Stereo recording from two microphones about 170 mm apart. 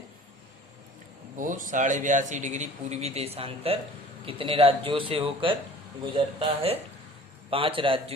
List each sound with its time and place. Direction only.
1.4 s a man's voice: 50° right (ahead or behind); by 8.1 s 30° right (ahead or behind)